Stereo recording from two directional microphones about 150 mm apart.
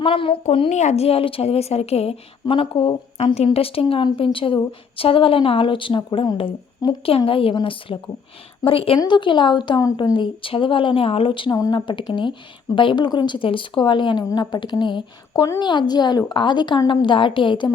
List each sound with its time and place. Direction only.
0.0 s a woman's voice: 35° left (ahead or behind)